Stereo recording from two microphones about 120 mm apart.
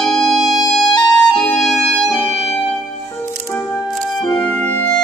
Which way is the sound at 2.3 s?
60° left (ahead or behind).